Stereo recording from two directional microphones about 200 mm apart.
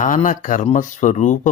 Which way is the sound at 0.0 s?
40° left (ahead or behind).